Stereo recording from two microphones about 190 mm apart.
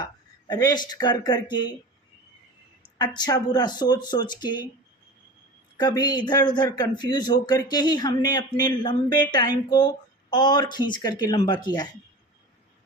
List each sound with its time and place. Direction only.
0.0 s speech: 20° left (ahead or behind)
3.0 s a man's voice: 20° left (ahead or behind)
5.7 s a man's voice: 20° left (ahead or behind)